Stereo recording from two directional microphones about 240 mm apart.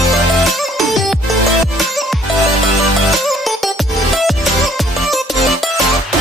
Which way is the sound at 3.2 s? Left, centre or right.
Centre.